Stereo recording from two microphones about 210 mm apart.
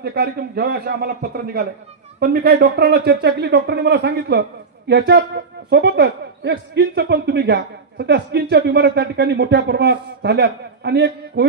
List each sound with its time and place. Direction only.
0.0 s speech: 50° right (ahead or behind)